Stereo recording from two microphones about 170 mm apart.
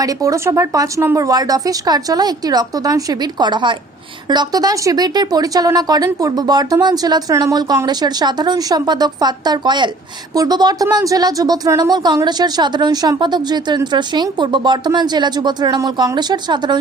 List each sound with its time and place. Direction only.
0.0 s speech: 20° right (ahead or behind)